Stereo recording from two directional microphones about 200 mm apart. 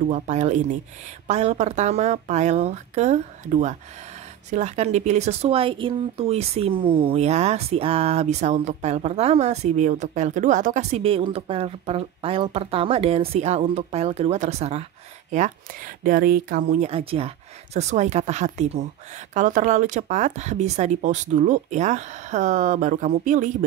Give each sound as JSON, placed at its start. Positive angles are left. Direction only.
{"t": 0.1, "sound": "speech", "side_deg": -35}
{"t": 16.0, "sound": "speech", "side_deg": -45}